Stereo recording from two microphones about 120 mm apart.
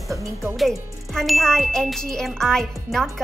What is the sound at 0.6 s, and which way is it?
Speech, centre (ahead or behind).